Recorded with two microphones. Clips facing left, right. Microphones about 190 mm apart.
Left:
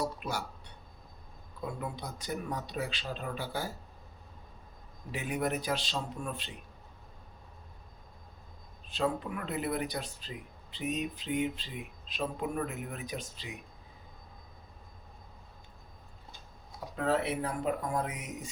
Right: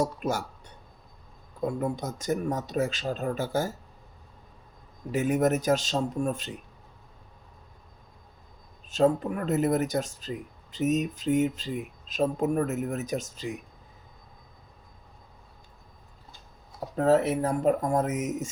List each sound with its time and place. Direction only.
0.0 s speech: 45° right (ahead or behind)
5.1 s speech: 45° right (ahead or behind)
8.9 s speech: 45° right (ahead or behind)
16.9 s speech: 40° right (ahead or behind)